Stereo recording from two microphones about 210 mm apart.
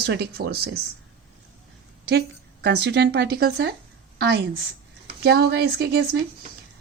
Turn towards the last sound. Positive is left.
turn(degrees=-50)  # may be behind; listen again after turning